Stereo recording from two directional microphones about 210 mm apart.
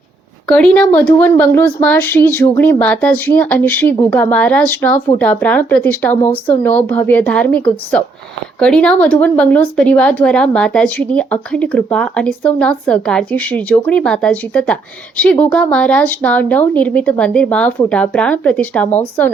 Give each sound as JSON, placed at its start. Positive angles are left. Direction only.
{"t": 0.4, "sound": "speech", "side_deg": 5}